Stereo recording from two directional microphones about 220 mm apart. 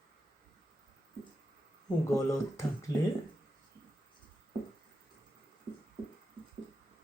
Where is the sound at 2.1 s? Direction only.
15° left (ahead or behind).